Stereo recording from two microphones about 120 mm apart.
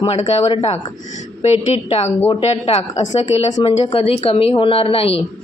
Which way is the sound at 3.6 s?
50° left (ahead or behind).